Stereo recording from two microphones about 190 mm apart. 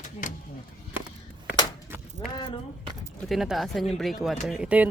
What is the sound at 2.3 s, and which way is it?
Speech, 25° left (ahead or behind).